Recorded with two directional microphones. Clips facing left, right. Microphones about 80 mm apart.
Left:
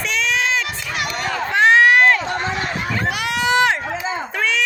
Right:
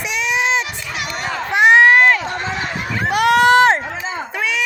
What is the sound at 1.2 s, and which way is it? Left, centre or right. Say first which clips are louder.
Crowd: right 2 dB; centre.